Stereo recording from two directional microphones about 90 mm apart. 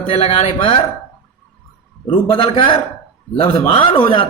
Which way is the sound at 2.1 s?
85° left.